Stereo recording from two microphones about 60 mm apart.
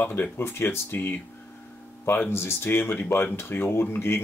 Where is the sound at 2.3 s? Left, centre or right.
Left.